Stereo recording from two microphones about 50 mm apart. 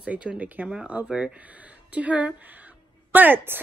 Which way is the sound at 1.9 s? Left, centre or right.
Right.